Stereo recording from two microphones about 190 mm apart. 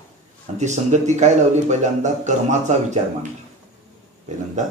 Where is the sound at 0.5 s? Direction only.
40° right (ahead or behind).